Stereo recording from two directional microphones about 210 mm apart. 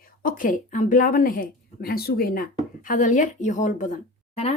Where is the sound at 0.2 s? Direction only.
40° left (ahead or behind).